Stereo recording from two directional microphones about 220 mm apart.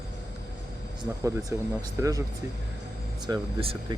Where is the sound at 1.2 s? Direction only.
15° right (ahead or behind).